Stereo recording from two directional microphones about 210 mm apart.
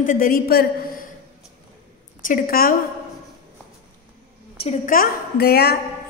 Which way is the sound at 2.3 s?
45° left (ahead or behind).